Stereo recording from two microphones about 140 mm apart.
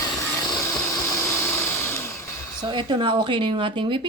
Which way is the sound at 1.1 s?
20° left (ahead or behind).